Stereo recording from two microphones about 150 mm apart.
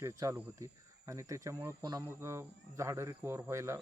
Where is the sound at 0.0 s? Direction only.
20° right (ahead or behind).